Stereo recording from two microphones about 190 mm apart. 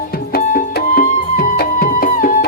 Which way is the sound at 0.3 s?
50° left (ahead or behind).